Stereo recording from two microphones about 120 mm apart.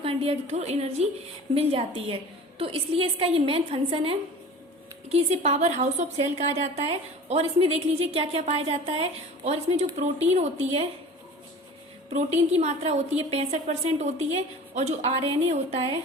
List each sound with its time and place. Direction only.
0.0 s a woman's voice: 55° right (ahead or behind)
1.5 s a woman's voice: 50° right (ahead or behind)
5.0 s a woman's voice: 60° right (ahead or behind)
12.1 s a woman's voice: 65° right (ahead or behind)